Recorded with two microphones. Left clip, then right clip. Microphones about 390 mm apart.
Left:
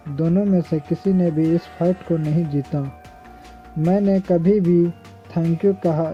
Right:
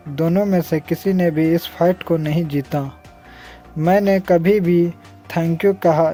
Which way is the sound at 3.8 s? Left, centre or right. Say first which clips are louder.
Right 5 dB; right.